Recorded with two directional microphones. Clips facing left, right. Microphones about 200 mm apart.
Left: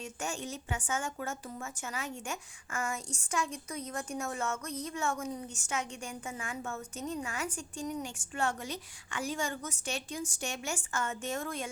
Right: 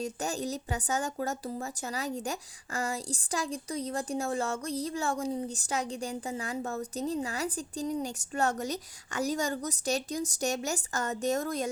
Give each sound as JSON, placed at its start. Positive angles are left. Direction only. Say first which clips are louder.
{"t": 0.0, "sound": "a woman's voice", "louder": "right 6 dB", "side_deg": -35}